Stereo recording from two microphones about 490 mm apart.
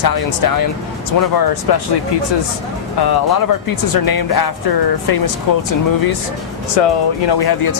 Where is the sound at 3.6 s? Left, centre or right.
Left.